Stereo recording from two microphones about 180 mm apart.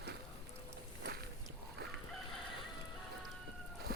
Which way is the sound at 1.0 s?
65° right (ahead or behind).